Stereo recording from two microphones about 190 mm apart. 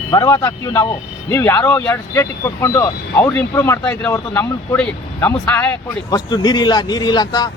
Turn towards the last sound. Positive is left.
turn(degrees=20)  # may be behind; listen again after turning